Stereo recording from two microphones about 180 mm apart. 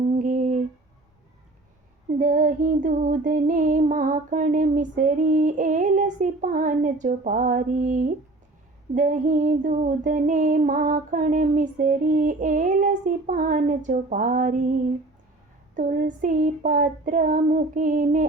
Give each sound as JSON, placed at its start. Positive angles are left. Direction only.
{"t": 0.2, "sound": "humming", "side_deg": -45}
{"t": 2.1, "sound": "female singing", "side_deg": -45}
{"t": 15.7, "sound": "female singing", "side_deg": -45}